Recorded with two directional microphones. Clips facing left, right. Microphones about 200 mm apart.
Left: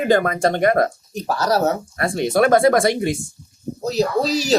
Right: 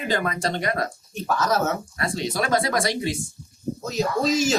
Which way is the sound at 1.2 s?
35° left (ahead or behind).